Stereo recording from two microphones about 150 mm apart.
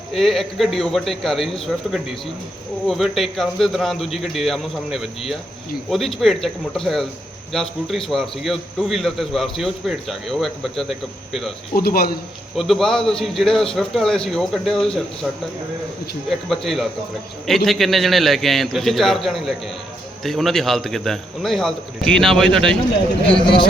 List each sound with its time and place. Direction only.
0.1 s a man's voice: centre (ahead or behind)
11.7 s a man's voice: 90° left
12.5 s a man's voice: centre (ahead or behind)
16.3 s a man's voice: centre (ahead or behind)